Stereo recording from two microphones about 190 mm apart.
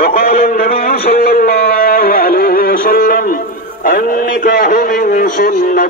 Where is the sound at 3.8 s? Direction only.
50° left (ahead or behind).